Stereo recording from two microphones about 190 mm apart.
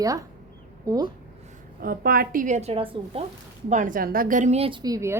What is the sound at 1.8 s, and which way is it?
A woman's voice, 50° right (ahead or behind).